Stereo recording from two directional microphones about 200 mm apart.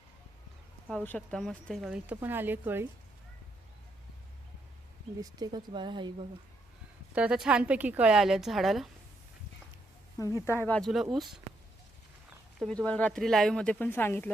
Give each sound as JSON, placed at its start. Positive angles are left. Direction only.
{"t": 0.9, "sound": "speech", "side_deg": 5}
{"t": 5.2, "sound": "speech", "side_deg": -20}
{"t": 7.1, "sound": "speech", "side_deg": -5}
{"t": 10.4, "sound": "speech", "side_deg": 10}
{"t": 12.5, "sound": "speech", "side_deg": 5}